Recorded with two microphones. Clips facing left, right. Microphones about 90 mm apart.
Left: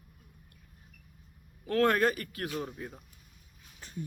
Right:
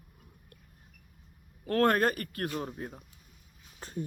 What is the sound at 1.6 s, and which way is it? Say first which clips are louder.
Speech: even; 45° right (ahead or behind).